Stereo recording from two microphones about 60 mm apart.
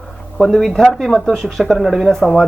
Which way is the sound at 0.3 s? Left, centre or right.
Centre.